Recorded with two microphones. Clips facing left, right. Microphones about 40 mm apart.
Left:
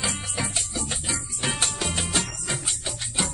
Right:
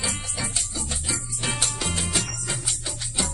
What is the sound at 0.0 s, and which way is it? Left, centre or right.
Music, left.